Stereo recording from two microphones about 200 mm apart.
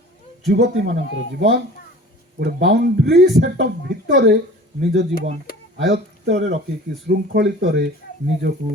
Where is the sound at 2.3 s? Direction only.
55° right (ahead or behind).